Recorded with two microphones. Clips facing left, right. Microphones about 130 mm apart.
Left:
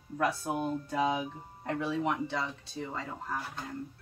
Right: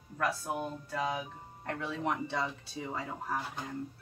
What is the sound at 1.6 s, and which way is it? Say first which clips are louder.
Speech: left 4 dB; 10° left (ahead or behind).